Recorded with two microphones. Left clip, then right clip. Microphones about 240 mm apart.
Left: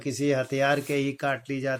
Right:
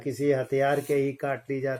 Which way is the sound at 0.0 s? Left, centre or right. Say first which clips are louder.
Even; left.